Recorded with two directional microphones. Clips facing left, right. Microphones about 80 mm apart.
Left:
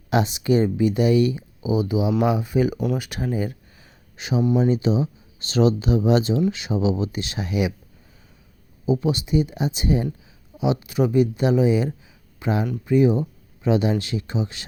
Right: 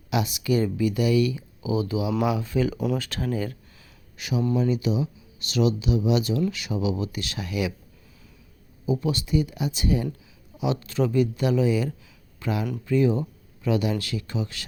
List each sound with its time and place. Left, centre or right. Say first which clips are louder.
0.1 s speech: left 4 dB; left
2.7 s speech: left 2 dB; centre
3.0 s speech: left 2 dB; centre; by 6.3 s left
6.5 s speech: left 4 dB; left
8.9 s speech: left 3 dB; left